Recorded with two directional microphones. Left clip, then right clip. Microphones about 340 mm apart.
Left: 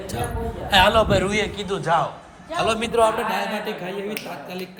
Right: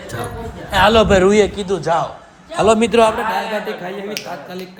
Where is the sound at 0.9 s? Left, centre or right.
Right.